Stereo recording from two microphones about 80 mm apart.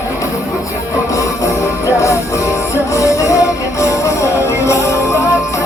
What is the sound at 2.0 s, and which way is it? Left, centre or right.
Music, left.